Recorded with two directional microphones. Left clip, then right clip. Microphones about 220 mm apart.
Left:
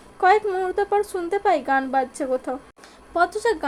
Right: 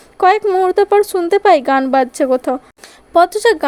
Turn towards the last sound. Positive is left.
turn(degrees=-35)  # may be behind; listen again after turning